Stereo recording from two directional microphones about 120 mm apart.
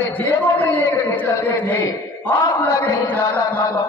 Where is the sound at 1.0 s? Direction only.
15° left (ahead or behind).